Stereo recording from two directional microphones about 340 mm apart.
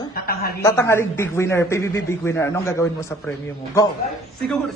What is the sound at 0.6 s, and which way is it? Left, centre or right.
A woman's voice, centre.